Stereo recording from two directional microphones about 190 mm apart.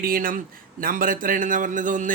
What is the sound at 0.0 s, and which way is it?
A man's voice, 50° right (ahead or behind).